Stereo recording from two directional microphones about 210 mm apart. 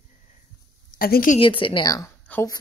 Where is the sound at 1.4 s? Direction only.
25° left (ahead or behind).